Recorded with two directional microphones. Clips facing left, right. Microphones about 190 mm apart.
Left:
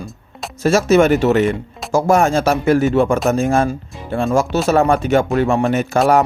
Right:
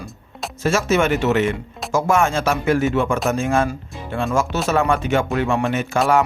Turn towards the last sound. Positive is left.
turn(degrees=40)  # may be behind; listen again after turning